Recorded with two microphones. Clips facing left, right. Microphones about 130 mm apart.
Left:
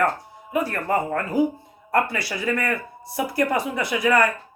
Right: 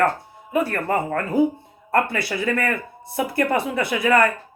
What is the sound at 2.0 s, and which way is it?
Speech, 55° right (ahead or behind).